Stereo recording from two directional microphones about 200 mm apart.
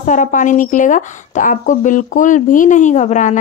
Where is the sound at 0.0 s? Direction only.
40° left (ahead or behind).